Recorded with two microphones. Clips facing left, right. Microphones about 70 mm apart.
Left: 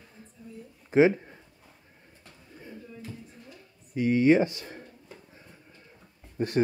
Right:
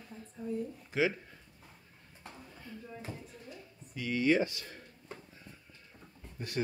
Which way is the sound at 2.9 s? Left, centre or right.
Right.